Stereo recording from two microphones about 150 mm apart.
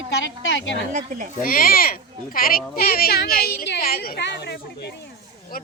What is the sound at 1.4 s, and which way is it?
A woman's voice, 70° left (ahead or behind).